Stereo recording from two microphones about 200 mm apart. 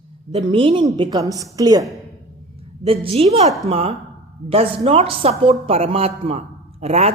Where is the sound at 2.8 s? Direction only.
30° right (ahead or behind).